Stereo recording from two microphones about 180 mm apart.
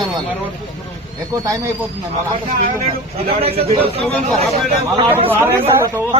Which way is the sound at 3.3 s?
35° right (ahead or behind).